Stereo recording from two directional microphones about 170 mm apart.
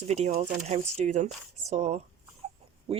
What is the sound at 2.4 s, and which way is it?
Dog, 35° right (ahead or behind).